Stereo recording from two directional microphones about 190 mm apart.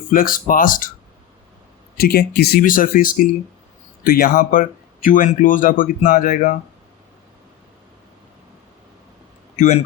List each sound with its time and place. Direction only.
0.1 s speech: 45° left (ahead or behind)
2.0 s speech: 55° left (ahead or behind)
9.6 s a man's voice: 40° left (ahead or behind)